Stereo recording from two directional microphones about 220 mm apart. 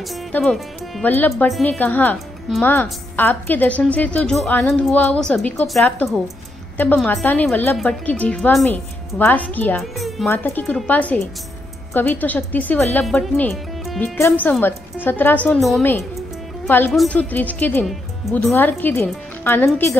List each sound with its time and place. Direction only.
0.1 s speech: centre (ahead or behind)